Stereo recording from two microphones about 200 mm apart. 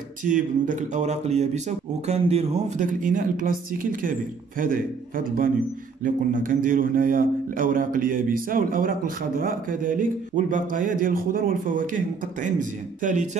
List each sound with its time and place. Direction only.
0.2 s speech: 40° right (ahead or behind)